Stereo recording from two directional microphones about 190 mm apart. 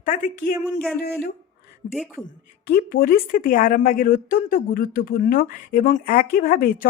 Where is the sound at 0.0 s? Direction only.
45° left (ahead or behind).